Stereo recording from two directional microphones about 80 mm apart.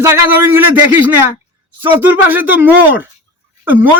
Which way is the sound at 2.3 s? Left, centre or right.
Right.